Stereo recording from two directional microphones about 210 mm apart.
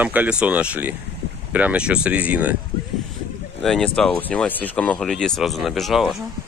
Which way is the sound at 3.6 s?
Centre (ahead or behind).